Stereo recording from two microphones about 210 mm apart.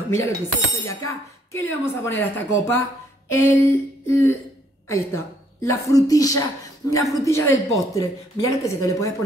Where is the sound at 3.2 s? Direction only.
10° left (ahead or behind).